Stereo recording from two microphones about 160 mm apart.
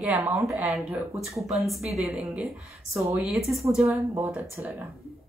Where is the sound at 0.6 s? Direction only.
10° right (ahead or behind).